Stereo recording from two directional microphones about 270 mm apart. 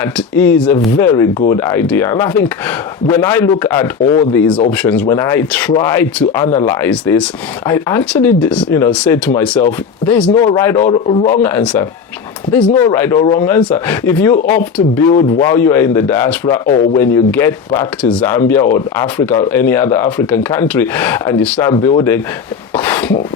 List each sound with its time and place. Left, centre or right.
0.0 s a man's voice: centre
10.8 s a man's voice: centre
11.4 s a man's voice: centre
22.7 s a sound: centre